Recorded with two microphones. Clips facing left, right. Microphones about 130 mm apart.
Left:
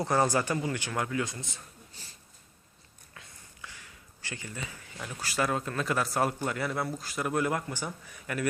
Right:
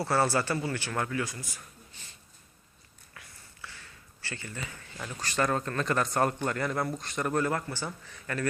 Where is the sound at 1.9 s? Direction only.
35° left (ahead or behind).